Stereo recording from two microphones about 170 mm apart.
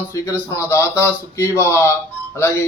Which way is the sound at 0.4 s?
15° left (ahead or behind).